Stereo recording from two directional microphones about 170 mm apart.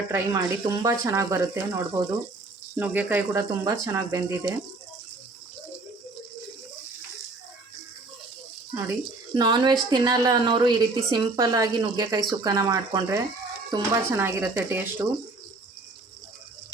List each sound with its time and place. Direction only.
0.1 s a woman's voice: 20° right (ahead or behind)
9.3 s a woman's voice: 25° right (ahead or behind)